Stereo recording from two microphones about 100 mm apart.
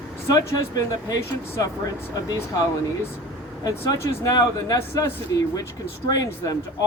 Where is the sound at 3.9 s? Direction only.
40° left (ahead or behind).